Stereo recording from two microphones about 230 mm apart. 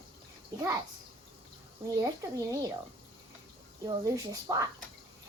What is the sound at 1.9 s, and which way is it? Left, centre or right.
Speech, centre.